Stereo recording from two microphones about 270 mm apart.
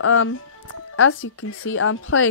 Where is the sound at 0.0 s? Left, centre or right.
Left.